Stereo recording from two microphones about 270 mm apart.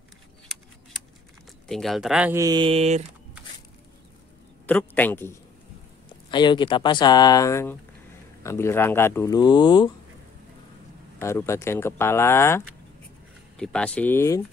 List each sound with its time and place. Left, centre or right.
1.7 s speech: centre; by 3.0 s right
4.6 s speech: centre
11.1 s speech: centre